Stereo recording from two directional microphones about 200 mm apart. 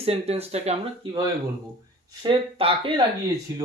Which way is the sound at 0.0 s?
30° right (ahead or behind).